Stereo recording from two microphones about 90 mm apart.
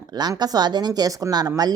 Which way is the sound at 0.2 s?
50° right (ahead or behind).